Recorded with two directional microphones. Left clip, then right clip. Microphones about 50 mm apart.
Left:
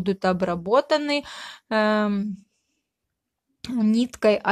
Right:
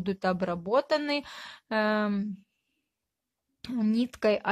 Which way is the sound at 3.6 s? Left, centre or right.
Centre.